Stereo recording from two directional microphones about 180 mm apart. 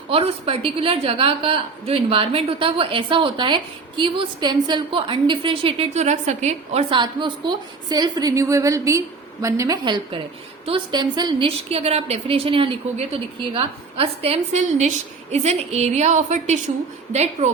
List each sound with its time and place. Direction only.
0.1 s a woman's voice: 35° right (ahead or behind)
6.9 s a woman's voice: 25° right (ahead or behind)